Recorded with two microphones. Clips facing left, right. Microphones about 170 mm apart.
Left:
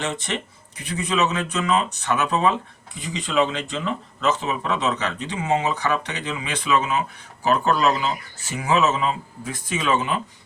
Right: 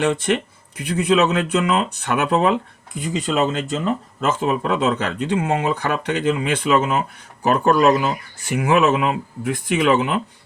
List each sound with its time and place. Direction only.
0.0 s speech: 55° right (ahead or behind)